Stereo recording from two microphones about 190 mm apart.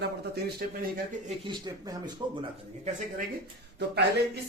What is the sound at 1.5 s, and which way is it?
Speech, 20° right (ahead or behind).